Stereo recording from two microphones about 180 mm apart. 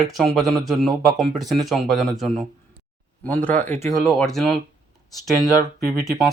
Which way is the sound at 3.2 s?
10° left (ahead or behind).